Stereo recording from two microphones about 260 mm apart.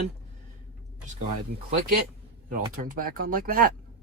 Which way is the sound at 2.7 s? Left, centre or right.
Right.